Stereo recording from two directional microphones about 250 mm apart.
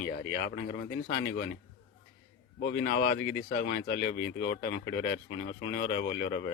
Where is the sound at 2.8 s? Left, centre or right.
Left.